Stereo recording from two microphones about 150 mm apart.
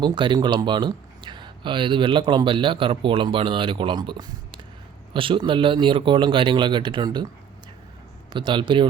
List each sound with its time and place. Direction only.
0.0 s speech: 30° right (ahead or behind)
8.3 s speech: 30° right (ahead or behind)